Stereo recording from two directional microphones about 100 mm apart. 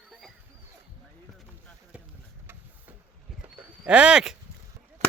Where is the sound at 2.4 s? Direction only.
20° right (ahead or behind).